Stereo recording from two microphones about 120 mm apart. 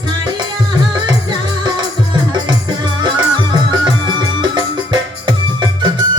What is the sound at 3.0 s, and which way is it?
Music, 40° right (ahead or behind).